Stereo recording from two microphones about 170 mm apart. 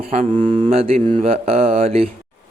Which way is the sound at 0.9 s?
45° right (ahead or behind).